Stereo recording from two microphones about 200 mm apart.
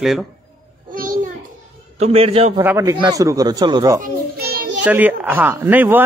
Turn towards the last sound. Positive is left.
turn(degrees=-10)  # may be behind; listen again after turning